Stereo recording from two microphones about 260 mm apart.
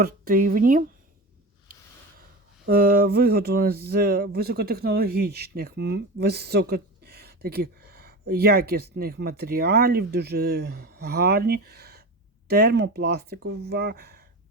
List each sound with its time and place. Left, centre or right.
0.0 s speech: right
2.6 s speech: right